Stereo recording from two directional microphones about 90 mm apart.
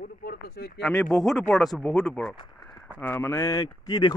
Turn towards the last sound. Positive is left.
turn(degrees=50)  # may be behind; listen again after turning